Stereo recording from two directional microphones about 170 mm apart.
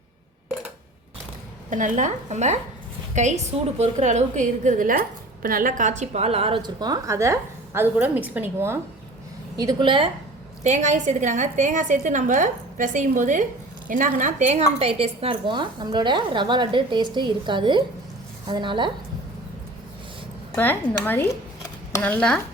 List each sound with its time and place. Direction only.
1.7 s a woman's voice: 45° right (ahead or behind); by 8.8 s 10° right (ahead or behind)
9.6 s a woman's voice: 25° right (ahead or behind)
10.6 s a woman's voice: 45° right (ahead or behind); by 18.9 s 30° right (ahead or behind)
20.6 s speech: 10° left (ahead or behind)